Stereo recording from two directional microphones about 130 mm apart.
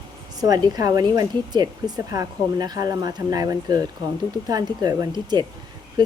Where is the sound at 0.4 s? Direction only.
30° right (ahead or behind).